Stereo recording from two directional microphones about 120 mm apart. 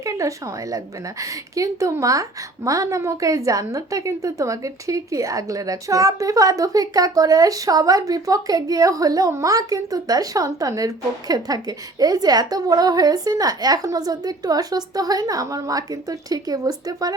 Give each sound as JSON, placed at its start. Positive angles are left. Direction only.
{"t": 0.0, "sound": "a woman's voice", "side_deg": -25}